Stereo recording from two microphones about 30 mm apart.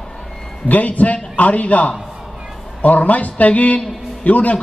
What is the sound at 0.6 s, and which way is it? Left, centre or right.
A man's voice, left.